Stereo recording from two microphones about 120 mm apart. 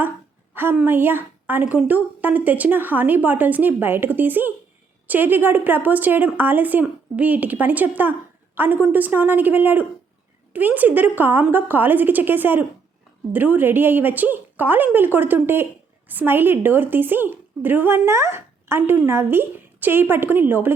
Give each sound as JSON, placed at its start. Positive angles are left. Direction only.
{"t": 0.5, "sound": "speech", "side_deg": -15}